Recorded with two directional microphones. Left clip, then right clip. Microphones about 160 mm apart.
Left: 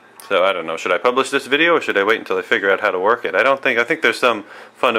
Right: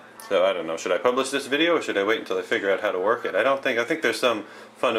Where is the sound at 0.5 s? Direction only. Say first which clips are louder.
Left 6 dB; 20° left (ahead or behind).